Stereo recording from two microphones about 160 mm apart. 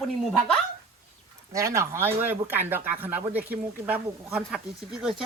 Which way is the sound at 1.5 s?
20° right (ahead or behind).